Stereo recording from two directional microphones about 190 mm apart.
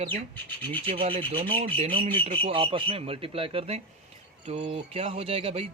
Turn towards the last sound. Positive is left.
turn(degrees=-30)  # may be behind; listen again after turning